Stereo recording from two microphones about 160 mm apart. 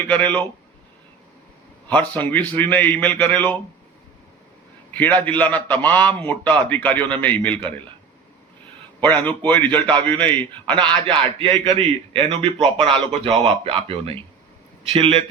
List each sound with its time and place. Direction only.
0.0 s a man's voice: 10° left (ahead or behind)
1.9 s a man's voice: 10° left (ahead or behind)
4.9 s a man's voice: 10° left (ahead or behind)
9.0 s a man's voice: 10° left (ahead or behind)
10.8 s a man's voice: 30° right (ahead or behind)